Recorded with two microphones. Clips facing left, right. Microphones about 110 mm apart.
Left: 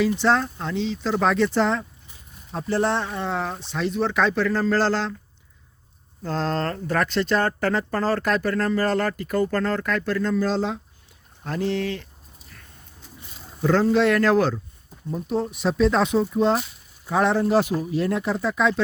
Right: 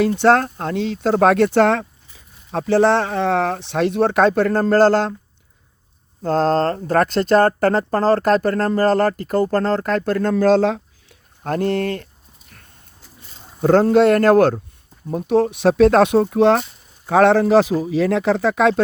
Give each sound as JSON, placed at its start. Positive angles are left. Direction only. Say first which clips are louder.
{"t": 0.0, "sound": "speech", "louder": "right 6 dB", "side_deg": -55}
{"t": 2.5, "sound": "speech", "louder": "right 8 dB", "side_deg": -90}
{"t": 6.2, "sound": "speech", "louder": "right 8 dB", "side_deg": -45}
{"t": 10.3, "sound": "speech", "louder": "right 12 dB", "side_deg": -70}
{"t": 11.4, "sound": "speech", "louder": "right 5 dB", "side_deg": -50}
{"t": 13.6, "sound": "speech", "louder": "right 6 dB", "side_deg": -50}
{"t": 15.1, "sound": "speech", "louder": "right 9 dB", "side_deg": -75}